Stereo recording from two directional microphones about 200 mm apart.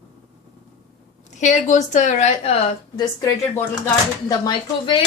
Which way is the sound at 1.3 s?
35° left (ahead or behind).